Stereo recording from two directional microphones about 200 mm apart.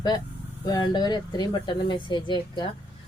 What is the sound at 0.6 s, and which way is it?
Speech, 20° left (ahead or behind).